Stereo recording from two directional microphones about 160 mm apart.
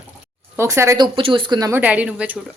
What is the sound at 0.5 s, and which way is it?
Speech, 15° right (ahead or behind).